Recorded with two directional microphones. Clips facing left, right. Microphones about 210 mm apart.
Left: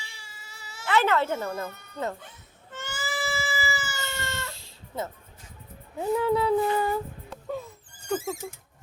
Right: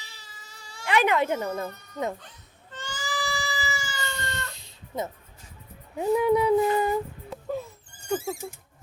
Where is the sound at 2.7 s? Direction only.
5° left (ahead or behind).